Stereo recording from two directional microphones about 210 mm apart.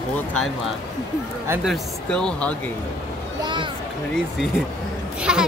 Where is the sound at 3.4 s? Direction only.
20° right (ahead or behind).